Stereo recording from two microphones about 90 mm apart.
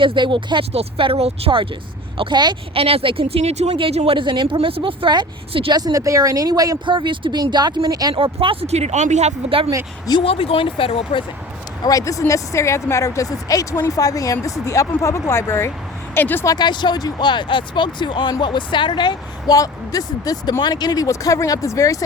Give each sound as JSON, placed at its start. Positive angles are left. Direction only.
{"t": 0.0, "sound": "speech", "side_deg": -65}
{"t": 2.1, "sound": "speech", "side_deg": -60}
{"t": 5.7, "sound": "speech", "side_deg": -45}
{"t": 6.8, "sound": "speech", "side_deg": -65}
{"t": 8.1, "sound": "speech", "side_deg": -85}
{"t": 10.2, "sound": "speech", "side_deg": 90}
{"t": 11.8, "sound": "speech", "side_deg": 40}
{"t": 16.5, "sound": "speech", "side_deg": 55}
{"t": 19.5, "sound": "speech", "side_deg": 40}